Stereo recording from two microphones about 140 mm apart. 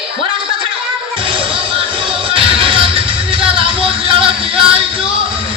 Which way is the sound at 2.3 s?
40° right (ahead or behind).